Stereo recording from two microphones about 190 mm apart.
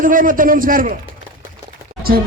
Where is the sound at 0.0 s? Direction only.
45° right (ahead or behind).